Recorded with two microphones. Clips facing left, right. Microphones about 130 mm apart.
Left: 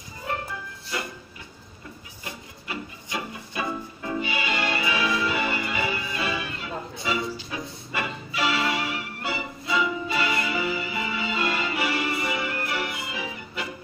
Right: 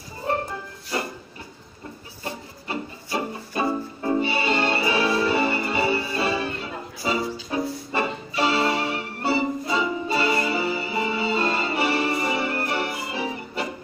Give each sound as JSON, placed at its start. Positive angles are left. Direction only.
{"t": 0.2, "sound": "music", "side_deg": -35}
{"t": 2.2, "sound": "music", "side_deg": -35}